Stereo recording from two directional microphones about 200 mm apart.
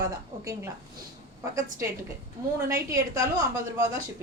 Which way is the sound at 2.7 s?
15° right (ahead or behind).